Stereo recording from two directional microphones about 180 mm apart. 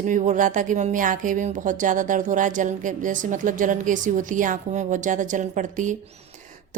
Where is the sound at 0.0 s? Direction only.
45° right (ahead or behind).